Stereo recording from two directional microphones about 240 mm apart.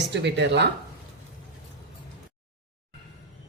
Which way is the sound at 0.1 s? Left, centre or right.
Right.